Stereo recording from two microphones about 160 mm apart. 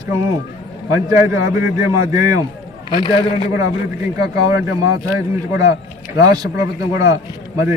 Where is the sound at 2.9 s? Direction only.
30° left (ahead or behind).